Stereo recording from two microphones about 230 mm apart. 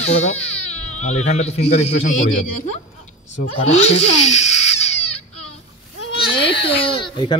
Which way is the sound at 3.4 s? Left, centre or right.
Left.